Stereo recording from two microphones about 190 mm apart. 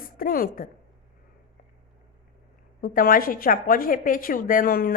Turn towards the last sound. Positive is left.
turn(degrees=50)  # may be behind; listen again after turning